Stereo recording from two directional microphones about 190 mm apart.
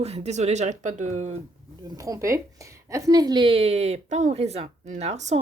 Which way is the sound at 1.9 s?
15° right (ahead or behind).